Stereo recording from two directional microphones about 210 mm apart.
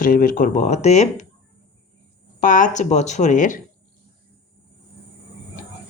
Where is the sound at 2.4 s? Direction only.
40° left (ahead or behind).